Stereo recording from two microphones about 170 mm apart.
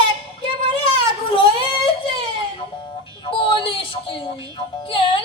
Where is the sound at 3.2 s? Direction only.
30° left (ahead or behind).